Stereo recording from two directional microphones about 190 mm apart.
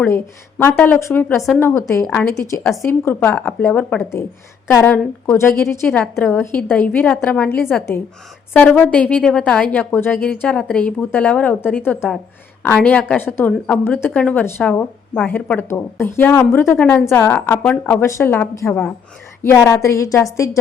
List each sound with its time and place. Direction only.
0.6 s a woman's voice: 10° left (ahead or behind)